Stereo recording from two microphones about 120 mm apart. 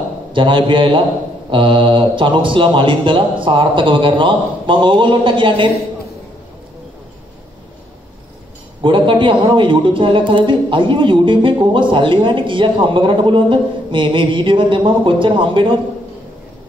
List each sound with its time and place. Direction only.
0.3 s a man's voice: 45° right (ahead or behind)
8.8 s a man's voice: 45° right (ahead or behind)